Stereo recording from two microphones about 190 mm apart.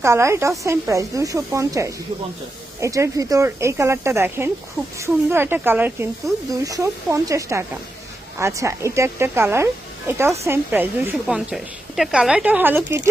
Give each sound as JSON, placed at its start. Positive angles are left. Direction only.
{"t": 0.0, "sound": "speech", "side_deg": -15}